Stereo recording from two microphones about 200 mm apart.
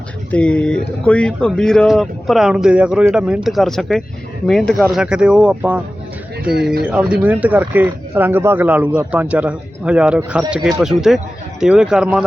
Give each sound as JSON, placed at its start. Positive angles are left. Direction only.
{"t": 0.3, "sound": "speech", "side_deg": 5}